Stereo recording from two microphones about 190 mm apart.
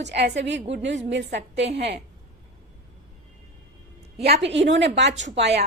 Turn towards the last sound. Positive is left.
turn(degrees=-60)  # may be behind; listen again after turning